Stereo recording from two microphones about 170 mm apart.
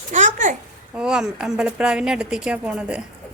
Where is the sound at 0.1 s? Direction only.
50° right (ahead or behind).